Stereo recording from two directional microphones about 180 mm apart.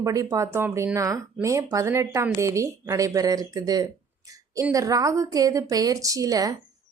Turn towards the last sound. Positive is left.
turn(degrees=-20)  # may be behind; listen again after turning